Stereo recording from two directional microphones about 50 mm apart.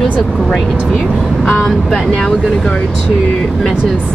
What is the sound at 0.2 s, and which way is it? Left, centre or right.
Speech, centre.